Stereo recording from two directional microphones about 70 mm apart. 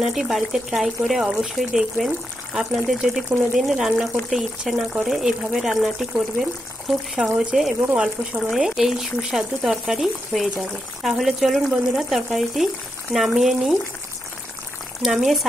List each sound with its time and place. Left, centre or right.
0.0 s speech: centre
7.3 s speech: centre
7.8 s speech: centre
8.5 s speech: centre
15.0 s speech: centre